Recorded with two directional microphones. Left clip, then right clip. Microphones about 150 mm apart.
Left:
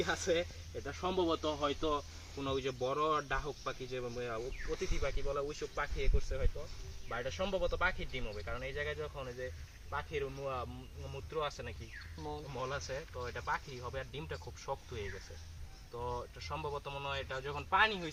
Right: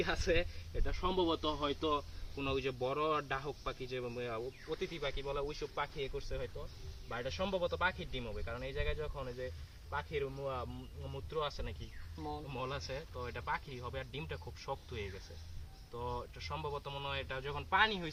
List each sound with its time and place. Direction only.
0.0 s speech: 25° right (ahead or behind)
7.1 s speech: 35° right (ahead or behind)
9.9 s speech: 25° right (ahead or behind)